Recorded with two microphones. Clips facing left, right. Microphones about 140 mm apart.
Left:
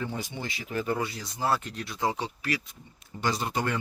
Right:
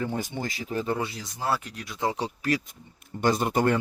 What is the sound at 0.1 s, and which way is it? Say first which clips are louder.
Speech: right 4 dB; 45° right (ahead or behind).